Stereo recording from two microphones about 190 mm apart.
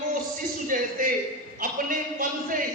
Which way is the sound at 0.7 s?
45° right (ahead or behind).